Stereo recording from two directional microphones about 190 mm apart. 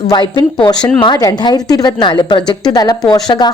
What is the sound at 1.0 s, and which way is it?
Speech, 20° left (ahead or behind).